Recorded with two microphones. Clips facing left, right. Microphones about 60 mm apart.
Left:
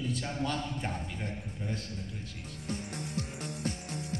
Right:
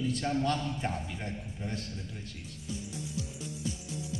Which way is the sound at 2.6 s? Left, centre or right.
Left.